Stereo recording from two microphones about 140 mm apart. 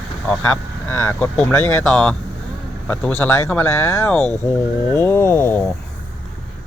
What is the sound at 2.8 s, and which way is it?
Speech, 15° left (ahead or behind).